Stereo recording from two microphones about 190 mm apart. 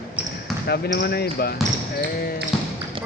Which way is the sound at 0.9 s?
60° left (ahead or behind).